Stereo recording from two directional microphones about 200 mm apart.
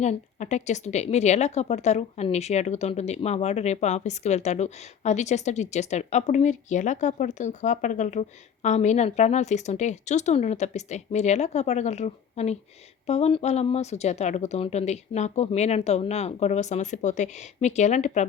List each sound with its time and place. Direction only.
0.0 s a woman's voice: 35° left (ahead or behind)